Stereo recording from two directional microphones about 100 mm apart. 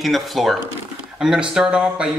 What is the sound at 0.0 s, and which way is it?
Speech, centre (ahead or behind).